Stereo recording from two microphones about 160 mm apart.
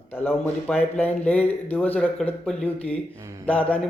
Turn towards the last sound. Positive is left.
turn(degrees=10)  # may be behind; listen again after turning